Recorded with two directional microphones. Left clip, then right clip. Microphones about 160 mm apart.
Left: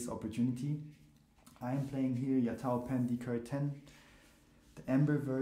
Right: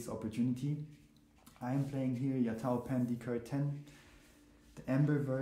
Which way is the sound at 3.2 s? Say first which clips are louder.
Even; 45° left (ahead or behind).